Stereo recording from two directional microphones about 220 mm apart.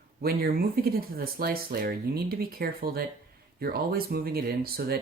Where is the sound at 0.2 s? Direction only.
45° right (ahead or behind).